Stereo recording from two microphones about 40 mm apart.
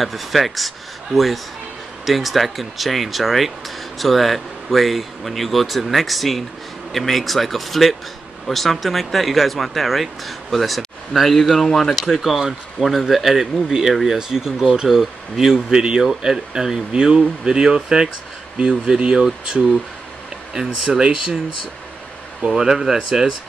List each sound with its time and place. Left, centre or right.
0.0 s speech: centre
12.0 s speech: centre
22.5 s speech: centre